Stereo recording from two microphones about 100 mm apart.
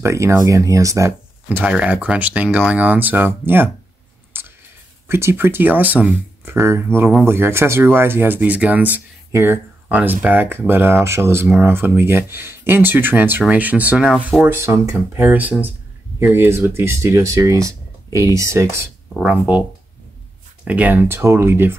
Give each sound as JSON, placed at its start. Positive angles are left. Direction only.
{"t": 0.0, "sound": "speech", "side_deg": -30}
{"t": 1.5, "sound": "speech", "side_deg": -10}
{"t": 4.3, "sound": "a sound", "side_deg": -20}
{"t": 5.0, "sound": "speech", "side_deg": -25}
{"t": 14.4, "sound": "speech", "side_deg": -25}
{"t": 19.1, "sound": "speech", "side_deg": -10}
{"t": 20.6, "sound": "speech", "side_deg": -15}